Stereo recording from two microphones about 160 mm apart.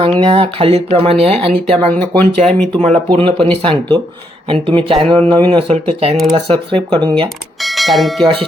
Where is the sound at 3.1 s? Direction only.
35° right (ahead or behind).